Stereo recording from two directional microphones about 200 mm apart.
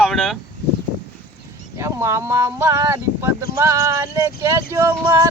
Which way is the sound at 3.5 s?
15° right (ahead or behind).